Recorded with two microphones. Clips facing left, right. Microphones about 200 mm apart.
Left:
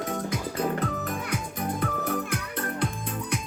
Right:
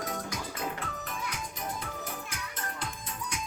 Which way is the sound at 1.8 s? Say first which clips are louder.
Left 11 dB; 60° left (ahead or behind).